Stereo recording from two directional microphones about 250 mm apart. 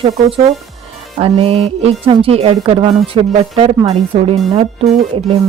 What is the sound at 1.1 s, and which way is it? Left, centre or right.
Speech, right.